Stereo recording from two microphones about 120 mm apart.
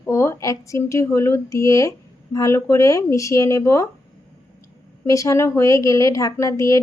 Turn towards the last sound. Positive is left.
turn(degrees=25)  # may be behind; listen again after turning